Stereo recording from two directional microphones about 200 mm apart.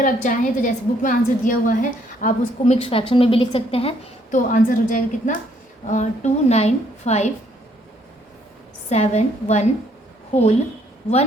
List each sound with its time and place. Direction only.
0.0 s a woman's voice: 40° left (ahead or behind)
8.9 s a woman's voice: 35° left (ahead or behind)